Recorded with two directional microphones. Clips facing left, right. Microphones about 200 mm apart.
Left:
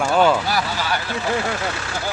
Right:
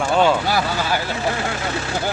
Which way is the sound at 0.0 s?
Centre (ahead or behind).